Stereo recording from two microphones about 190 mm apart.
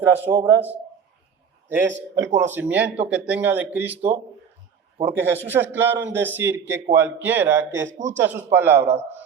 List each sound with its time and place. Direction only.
0.0 s speech: 10° right (ahead or behind)
2.1 s speech: 15° right (ahead or behind)
7.9 s a man's voice: 40° right (ahead or behind)
8.2 s speech: 10° right (ahead or behind)